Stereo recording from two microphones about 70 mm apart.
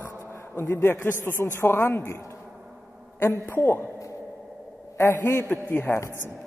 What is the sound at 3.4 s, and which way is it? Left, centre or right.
Speech, left.